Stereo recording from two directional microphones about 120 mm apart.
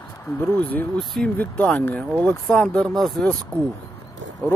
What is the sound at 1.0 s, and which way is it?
Speech, centre (ahead or behind).